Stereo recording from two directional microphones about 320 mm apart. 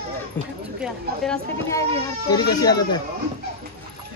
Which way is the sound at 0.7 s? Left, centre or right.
Centre.